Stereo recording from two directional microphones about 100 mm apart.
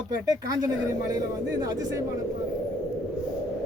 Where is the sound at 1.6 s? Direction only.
40° right (ahead or behind).